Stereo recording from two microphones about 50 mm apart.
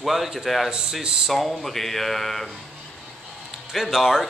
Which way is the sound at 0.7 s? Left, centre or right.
Centre.